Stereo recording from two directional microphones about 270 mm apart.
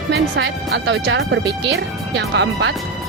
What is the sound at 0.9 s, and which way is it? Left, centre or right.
Speech, right.